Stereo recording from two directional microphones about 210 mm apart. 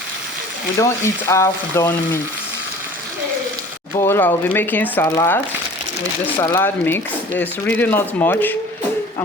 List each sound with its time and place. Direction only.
0.8 s speech: 15° left (ahead or behind)
3.9 s speech: 10° left (ahead or behind)
6.4 s speech: 10° left (ahead or behind)